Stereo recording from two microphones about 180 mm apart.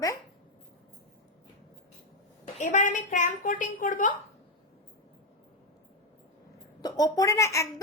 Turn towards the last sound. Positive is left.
turn(degrees=15)  # may be behind; listen again after turning